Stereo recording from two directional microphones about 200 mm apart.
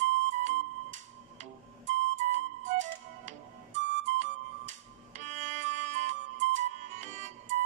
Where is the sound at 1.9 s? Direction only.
40° right (ahead or behind).